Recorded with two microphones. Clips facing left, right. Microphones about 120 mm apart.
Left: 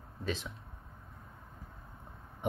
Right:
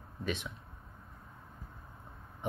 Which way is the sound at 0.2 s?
35° left (ahead or behind).